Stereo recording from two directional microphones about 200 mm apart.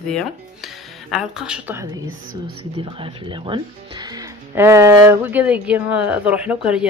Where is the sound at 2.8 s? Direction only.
25° right (ahead or behind).